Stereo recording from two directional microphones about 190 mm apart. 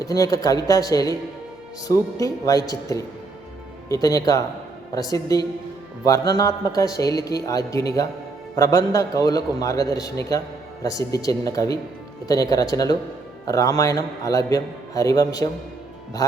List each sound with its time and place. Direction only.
0.0 s a man's voice: 20° left (ahead or behind)